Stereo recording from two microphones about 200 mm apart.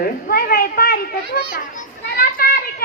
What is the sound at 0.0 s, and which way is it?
A child's voice, 50° left (ahead or behind).